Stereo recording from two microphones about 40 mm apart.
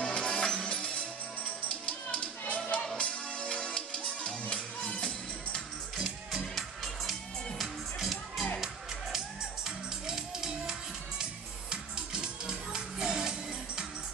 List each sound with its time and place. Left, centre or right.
0.0 s music: left
3.0 s music: left
6.5 s music: centre
9.7 s music: centre